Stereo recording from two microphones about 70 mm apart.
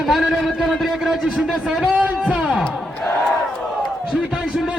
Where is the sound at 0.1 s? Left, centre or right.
Centre.